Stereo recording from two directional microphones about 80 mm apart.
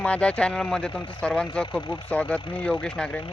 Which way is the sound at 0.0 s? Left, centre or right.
Centre.